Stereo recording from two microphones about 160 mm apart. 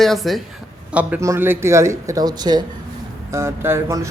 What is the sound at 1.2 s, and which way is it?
Speech, 15° right (ahead or behind).